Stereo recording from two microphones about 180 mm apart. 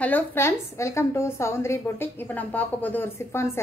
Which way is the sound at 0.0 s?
10° left (ahead or behind).